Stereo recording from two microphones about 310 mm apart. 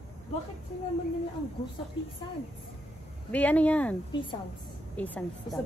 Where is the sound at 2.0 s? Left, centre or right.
Centre.